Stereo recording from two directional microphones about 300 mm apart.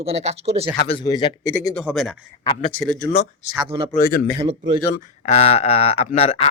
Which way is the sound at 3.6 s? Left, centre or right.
Centre.